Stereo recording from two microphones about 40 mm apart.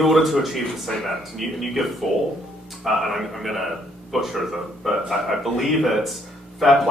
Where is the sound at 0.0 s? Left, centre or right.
Centre.